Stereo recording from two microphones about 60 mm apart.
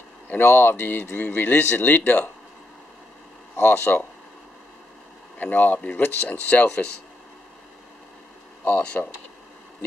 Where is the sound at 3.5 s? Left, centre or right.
Left.